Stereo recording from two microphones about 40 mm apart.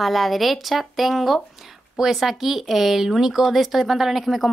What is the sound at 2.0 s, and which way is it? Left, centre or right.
Speech, centre.